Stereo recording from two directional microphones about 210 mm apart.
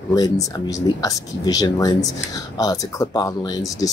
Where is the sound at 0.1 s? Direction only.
15° left (ahead or behind).